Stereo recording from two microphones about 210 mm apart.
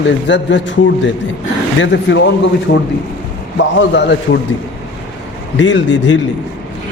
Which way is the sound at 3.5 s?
60° left (ahead or behind).